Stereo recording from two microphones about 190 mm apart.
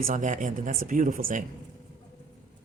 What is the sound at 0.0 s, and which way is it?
Speech, 45° right (ahead or behind).